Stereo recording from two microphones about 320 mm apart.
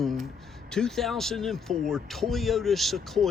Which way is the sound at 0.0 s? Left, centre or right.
Centre.